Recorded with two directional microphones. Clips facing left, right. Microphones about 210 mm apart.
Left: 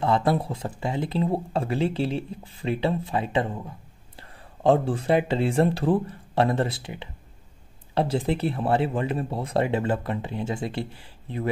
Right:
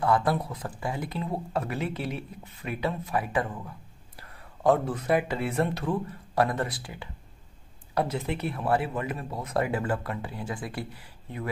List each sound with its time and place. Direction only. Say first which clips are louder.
0.0 s speech: left 2 dB; 25° left (ahead or behind)